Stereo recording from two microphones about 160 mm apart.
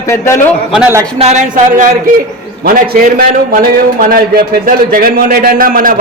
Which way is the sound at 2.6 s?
65° right (ahead or behind).